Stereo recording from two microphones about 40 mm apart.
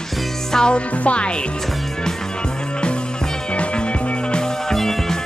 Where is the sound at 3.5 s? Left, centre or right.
Left.